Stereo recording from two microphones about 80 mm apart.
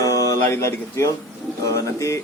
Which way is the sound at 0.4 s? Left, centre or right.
Left.